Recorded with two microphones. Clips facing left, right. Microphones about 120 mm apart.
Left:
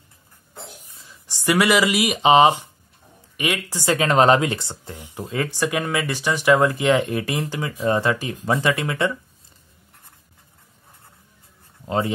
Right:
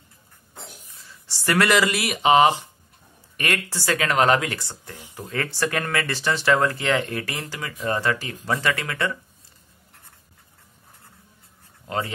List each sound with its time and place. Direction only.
0.9 s speech: 15° left (ahead or behind)